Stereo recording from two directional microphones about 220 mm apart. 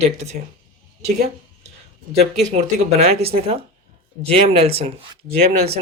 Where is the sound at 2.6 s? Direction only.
25° right (ahead or behind).